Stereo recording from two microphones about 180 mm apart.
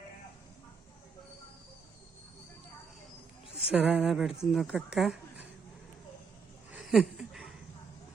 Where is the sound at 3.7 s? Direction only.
5° right (ahead or behind).